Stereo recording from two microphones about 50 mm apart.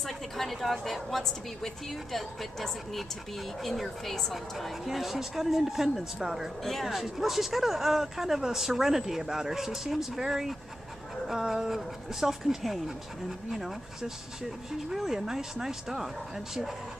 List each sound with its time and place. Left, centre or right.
0.0 s a woman's voice: centre
6.6 s speech: centre